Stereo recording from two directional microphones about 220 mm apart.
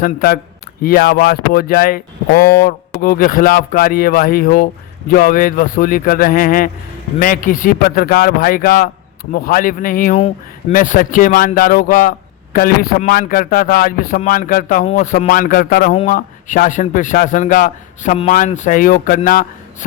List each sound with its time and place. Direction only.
0.0 s speech: 45° left (ahead or behind)